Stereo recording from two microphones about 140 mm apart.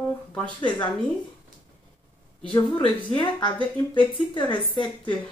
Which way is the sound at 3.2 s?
35° left (ahead or behind).